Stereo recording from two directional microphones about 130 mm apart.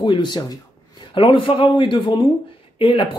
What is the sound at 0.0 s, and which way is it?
Speech, 35° left (ahead or behind).